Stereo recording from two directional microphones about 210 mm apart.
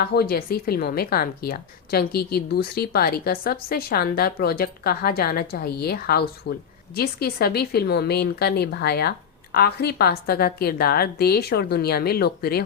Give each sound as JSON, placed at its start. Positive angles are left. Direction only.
{"t": 0.0, "sound": "speech", "side_deg": 45}